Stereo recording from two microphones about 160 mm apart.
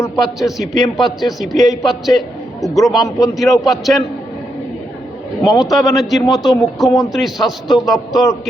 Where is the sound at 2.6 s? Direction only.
20° left (ahead or behind).